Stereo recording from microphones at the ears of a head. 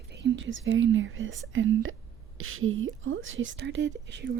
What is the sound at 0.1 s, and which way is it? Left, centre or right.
Speech, right.